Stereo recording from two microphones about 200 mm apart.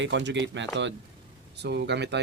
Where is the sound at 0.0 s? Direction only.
60° right (ahead or behind).